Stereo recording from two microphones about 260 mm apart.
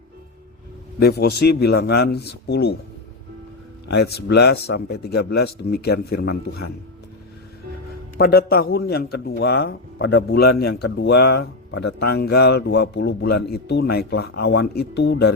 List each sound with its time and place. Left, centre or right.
0.9 s a man's voice: left
3.8 s a man's voice: left
8.2 s a man's voice: left